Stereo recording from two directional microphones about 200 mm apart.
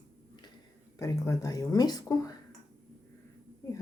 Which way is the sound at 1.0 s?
15° left (ahead or behind).